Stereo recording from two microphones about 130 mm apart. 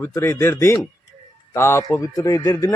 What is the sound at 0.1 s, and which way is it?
A man's voice, 20° left (ahead or behind).